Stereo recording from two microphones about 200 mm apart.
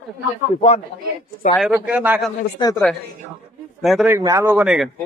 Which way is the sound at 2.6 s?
15° left (ahead or behind).